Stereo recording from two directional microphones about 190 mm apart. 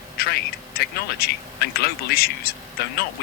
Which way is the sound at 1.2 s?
55° left (ahead or behind).